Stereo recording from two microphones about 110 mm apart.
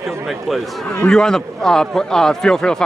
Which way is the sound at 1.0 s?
5° left (ahead or behind).